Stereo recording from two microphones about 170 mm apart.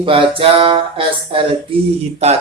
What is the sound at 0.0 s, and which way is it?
Speech, 30° right (ahead or behind).